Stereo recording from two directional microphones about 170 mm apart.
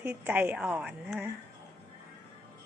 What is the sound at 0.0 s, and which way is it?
A woman's voice, 10° right (ahead or behind).